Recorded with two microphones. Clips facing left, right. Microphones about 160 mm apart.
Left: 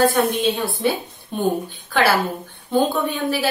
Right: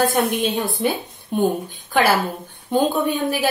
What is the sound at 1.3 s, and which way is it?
Speech, 15° right (ahead or behind).